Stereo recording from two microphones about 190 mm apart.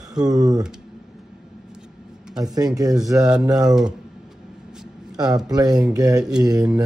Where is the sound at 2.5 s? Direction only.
20° right (ahead or behind).